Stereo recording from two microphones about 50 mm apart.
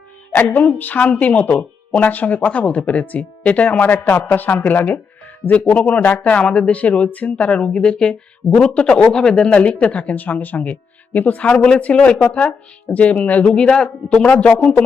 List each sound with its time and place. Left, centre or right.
0.5 s speech: left
3.8 s speech: left
6.1 s speech: left
9.5 s speech: left
11.5 s speech: centre
11.8 s speech: left
13.6 s speech: centre